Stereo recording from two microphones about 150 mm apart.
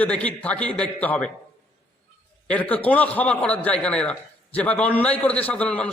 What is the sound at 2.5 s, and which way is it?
A man's voice, 10° left (ahead or behind).